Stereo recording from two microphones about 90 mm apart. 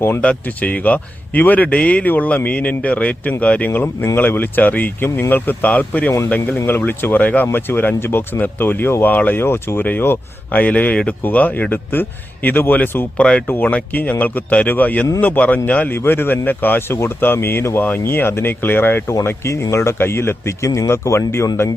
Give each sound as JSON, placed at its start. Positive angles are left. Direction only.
{"t": 0.2, "sound": "speech", "side_deg": 15}
{"t": 3.7, "sound": "speech", "side_deg": 25}